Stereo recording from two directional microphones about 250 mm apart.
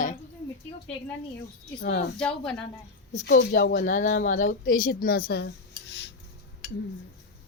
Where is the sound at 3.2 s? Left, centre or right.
Left.